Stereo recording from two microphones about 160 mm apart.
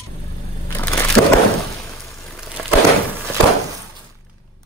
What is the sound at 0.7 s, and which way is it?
Crushing, 15° left (ahead or behind).